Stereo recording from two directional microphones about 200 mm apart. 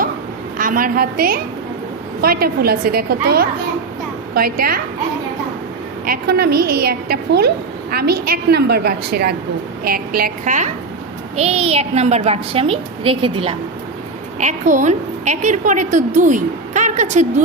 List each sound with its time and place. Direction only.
0.6 s a woman's voice: 45° right (ahead or behind)
6.1 s a woman's voice: 50° right (ahead or behind); by 13.6 s 25° right (ahead or behind)
14.3 s a woman's voice: 35° right (ahead or behind)